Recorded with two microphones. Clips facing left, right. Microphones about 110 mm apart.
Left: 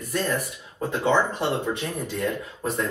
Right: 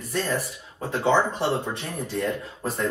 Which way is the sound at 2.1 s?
Centre (ahead or behind).